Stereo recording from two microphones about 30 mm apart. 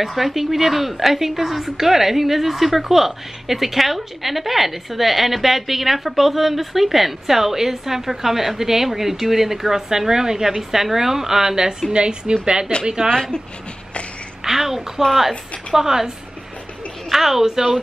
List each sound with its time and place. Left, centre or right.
0.0 s a woman's voice: centre
11.9 s a woman's voice: right
14.4 s a woman's voice: centre
17.1 s a woman's voice: centre